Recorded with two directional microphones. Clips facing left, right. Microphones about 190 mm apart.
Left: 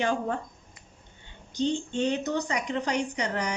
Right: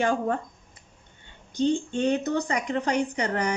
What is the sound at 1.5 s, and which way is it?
A woman's voice, 55° right (ahead or behind).